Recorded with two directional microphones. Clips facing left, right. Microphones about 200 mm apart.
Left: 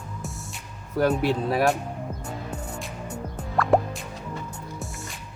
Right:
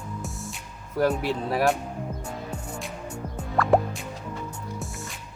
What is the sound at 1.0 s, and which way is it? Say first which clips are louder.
Speech: left 2 dB; centre (ahead or behind).